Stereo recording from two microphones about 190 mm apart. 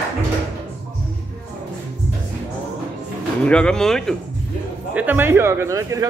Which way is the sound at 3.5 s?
5° left (ahead or behind).